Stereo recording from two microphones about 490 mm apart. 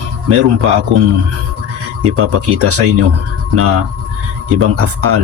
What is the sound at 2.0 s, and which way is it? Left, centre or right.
Speech, right.